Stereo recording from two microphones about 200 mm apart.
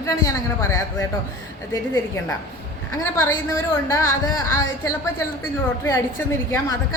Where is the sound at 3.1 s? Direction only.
10° left (ahead or behind).